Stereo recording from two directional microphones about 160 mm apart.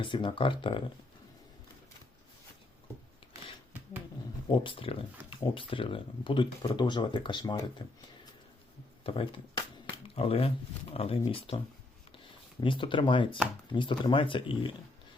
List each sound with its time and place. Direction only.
0.0 s speech: 30° left (ahead or behind)
3.7 s a sound: 10° right (ahead or behind)
4.4 s speech: 30° left (ahead or behind)
9.0 s speech: 35° left (ahead or behind)